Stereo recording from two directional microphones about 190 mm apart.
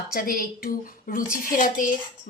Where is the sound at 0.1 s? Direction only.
50° left (ahead or behind).